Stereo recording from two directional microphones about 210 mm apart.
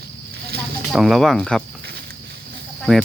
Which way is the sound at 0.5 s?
50° right (ahead or behind).